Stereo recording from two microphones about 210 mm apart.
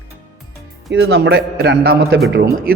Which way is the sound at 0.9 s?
55° right (ahead or behind).